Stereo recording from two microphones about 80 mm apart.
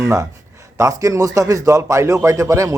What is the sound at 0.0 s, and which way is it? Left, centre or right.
A man's voice, right.